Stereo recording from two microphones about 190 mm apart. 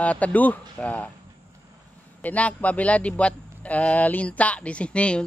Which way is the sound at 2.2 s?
10° left (ahead or behind).